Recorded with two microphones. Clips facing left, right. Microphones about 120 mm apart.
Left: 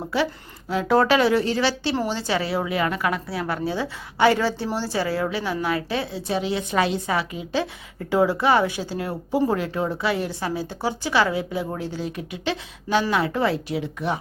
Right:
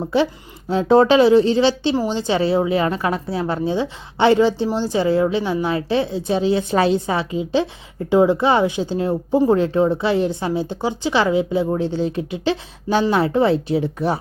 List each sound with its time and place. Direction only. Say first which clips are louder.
0.0 s a woman's voice: right 5 dB; 25° right (ahead or behind)